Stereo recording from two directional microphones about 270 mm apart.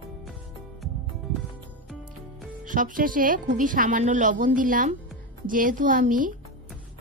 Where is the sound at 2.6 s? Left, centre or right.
Right.